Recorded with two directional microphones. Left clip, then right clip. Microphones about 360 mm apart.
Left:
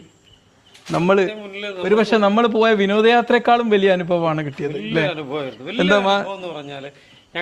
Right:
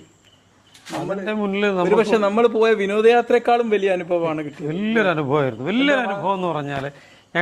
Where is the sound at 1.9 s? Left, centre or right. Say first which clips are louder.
Left 4 dB; left.